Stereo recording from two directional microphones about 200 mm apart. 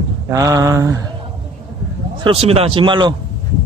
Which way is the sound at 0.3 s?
15° right (ahead or behind).